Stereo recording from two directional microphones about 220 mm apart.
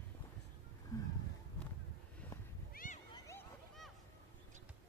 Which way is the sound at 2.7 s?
40° left (ahead or behind).